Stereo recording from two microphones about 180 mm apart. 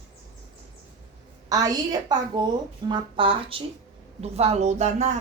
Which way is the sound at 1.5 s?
20° right (ahead or behind).